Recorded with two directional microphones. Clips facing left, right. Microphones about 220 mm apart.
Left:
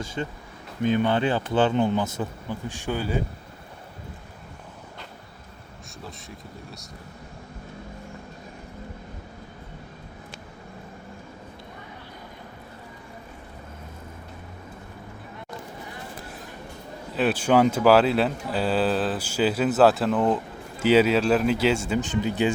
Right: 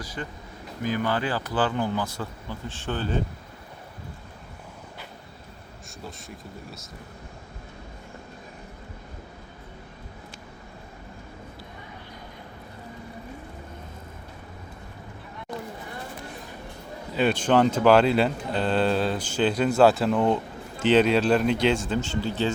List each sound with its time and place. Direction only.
0.0 s speech: 25° left (ahead or behind); by 3.2 s 10° left (ahead or behind)
6.0 s speech: centre (ahead or behind)
17.2 s speech: 5° left (ahead or behind)